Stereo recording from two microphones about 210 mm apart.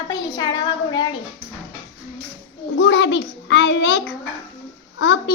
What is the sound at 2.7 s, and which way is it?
A child's voice, 60° left (ahead or behind).